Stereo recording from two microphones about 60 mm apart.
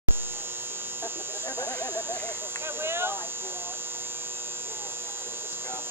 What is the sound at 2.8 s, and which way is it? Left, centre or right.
Speech, right.